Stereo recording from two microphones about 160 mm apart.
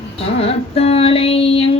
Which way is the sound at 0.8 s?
40° left (ahead or behind).